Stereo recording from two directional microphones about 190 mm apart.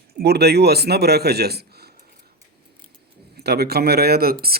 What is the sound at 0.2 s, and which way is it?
A man's voice, 60° right (ahead or behind).